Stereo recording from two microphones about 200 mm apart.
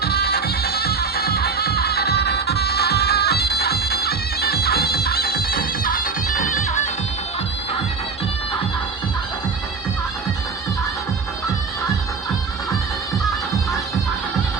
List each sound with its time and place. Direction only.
0.0 s music: 50° left (ahead or behind)